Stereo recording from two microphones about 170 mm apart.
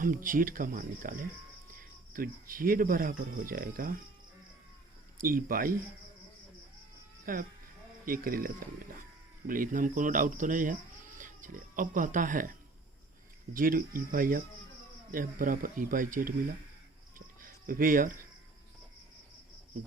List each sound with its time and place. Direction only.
0.0 s speech: 55° right (ahead or behind)
5.1 s speech: 55° right (ahead or behind)
7.3 s speech: 60° right (ahead or behind)
17.2 s a sound: 55° right (ahead or behind)